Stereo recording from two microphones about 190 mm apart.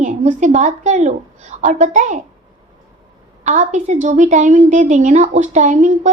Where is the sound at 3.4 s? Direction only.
40° right (ahead or behind).